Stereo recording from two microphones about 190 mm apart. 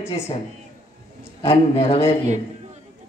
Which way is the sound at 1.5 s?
30° left (ahead or behind).